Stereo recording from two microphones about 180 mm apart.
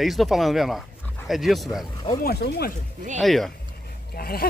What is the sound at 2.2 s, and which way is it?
Speech, 60° left (ahead or behind).